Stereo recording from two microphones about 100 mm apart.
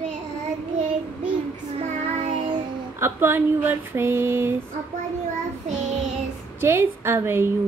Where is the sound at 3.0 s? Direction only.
25° right (ahead or behind).